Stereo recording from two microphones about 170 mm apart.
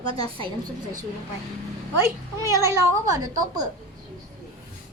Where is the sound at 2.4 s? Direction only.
15° right (ahead or behind).